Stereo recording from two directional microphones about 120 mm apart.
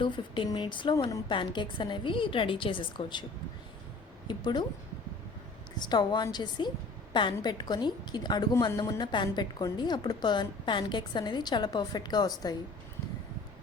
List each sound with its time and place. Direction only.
0.4 s a woman's voice: 35° left (ahead or behind)
4.3 s a woman's voice: 40° left (ahead or behind)
5.8 s a woman's voice: 35° left (ahead or behind)